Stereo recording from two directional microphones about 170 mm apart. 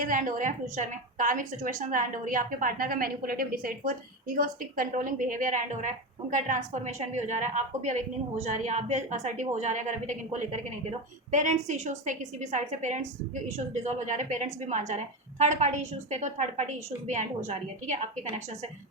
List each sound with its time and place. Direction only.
0.0 s a woman's voice: 50° right (ahead or behind)